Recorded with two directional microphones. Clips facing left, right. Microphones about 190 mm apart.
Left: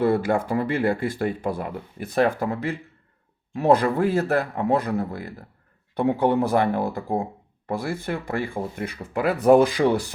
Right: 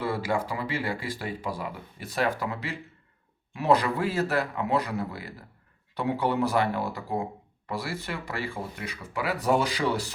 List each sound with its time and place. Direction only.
0.0 s speech: 55° left (ahead or behind)